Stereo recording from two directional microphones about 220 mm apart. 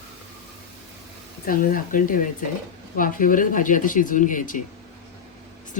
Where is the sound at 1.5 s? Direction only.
40° left (ahead or behind).